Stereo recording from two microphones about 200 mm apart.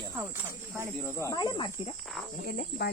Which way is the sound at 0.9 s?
10° left (ahead or behind).